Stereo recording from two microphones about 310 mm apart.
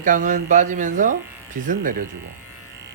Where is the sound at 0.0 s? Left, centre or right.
Right.